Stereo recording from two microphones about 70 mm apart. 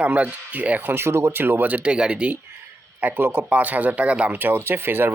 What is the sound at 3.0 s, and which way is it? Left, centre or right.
A man's voice, right.